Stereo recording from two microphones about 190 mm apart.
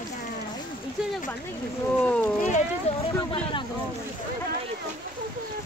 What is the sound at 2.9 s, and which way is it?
Speech, 35° left (ahead or behind).